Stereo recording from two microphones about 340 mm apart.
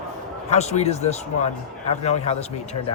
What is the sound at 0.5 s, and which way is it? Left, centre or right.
Speech, centre.